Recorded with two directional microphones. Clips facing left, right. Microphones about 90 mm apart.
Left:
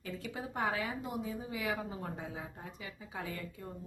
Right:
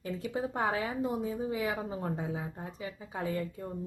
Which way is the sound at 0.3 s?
30° right (ahead or behind).